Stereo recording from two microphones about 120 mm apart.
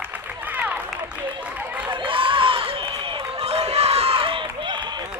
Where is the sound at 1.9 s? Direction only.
45° right (ahead or behind).